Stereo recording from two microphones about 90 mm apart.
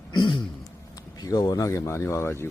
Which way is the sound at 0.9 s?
45° left (ahead or behind).